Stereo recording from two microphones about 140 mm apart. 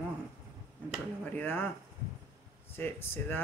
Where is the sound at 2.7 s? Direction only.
15° left (ahead or behind).